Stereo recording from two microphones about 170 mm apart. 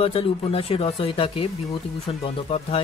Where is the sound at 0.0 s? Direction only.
35° left (ahead or behind).